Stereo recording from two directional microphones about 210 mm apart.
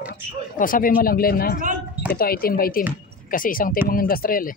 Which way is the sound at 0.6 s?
40° left (ahead or behind).